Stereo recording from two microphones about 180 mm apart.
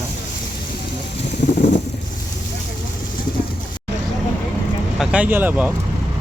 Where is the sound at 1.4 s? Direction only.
40° left (ahead or behind).